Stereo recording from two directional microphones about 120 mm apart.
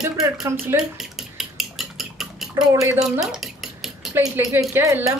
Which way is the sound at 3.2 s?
Centre (ahead or behind).